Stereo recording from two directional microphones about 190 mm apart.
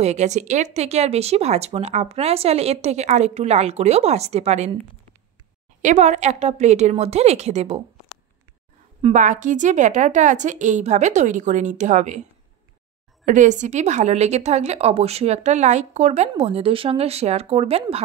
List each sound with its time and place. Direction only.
0.0 s a woman's voice: 35° right (ahead or behind)
5.8 s a woman's voice: 40° right (ahead or behind)
9.0 s a woman's voice: 40° right (ahead or behind)
13.2 s a woman's voice: 40° right (ahead or behind)